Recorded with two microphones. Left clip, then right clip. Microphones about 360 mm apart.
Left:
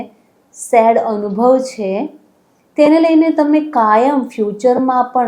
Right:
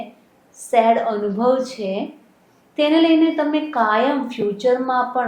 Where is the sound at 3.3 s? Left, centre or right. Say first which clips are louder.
Left 6 dB; left.